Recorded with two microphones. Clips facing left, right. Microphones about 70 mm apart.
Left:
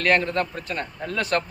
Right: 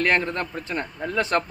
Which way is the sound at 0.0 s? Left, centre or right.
Right.